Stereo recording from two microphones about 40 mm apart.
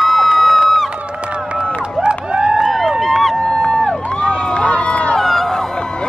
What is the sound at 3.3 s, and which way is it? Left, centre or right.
Crowd, left.